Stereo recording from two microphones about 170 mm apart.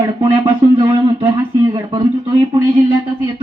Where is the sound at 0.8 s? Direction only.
30° right (ahead or behind).